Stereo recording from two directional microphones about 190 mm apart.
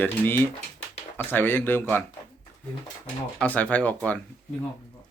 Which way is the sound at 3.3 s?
10° left (ahead or behind).